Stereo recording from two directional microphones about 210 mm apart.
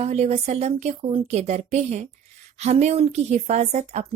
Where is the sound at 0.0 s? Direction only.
30° right (ahead or behind).